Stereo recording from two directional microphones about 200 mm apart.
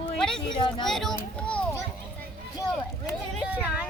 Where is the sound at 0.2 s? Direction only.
5° left (ahead or behind).